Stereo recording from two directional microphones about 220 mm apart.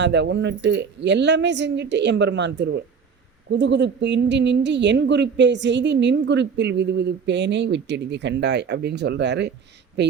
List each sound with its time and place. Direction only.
0.0 s a woman's voice: 50° right (ahead or behind)